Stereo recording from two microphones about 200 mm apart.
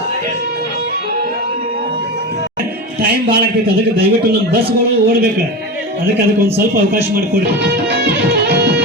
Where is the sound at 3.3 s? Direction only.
50° right (ahead or behind).